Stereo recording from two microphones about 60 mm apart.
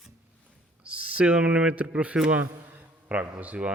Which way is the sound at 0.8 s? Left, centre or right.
Right.